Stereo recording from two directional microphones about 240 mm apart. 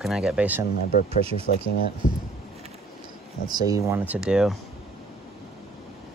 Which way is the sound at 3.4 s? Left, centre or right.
Centre.